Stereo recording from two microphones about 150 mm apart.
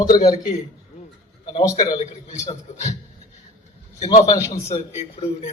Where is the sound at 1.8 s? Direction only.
25° left (ahead or behind).